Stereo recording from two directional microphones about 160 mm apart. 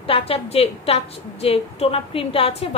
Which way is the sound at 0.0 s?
35° left (ahead or behind).